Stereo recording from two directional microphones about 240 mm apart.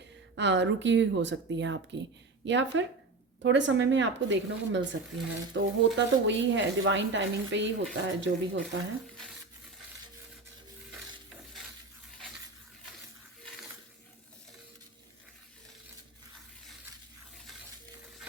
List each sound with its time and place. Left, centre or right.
0.3 s speech: right